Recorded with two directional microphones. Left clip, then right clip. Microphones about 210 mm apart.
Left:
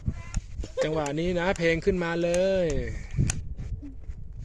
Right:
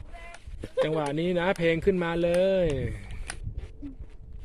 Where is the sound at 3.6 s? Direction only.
25° right (ahead or behind).